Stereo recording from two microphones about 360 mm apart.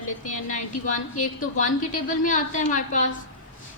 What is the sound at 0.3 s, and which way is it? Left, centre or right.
A woman's voice, left.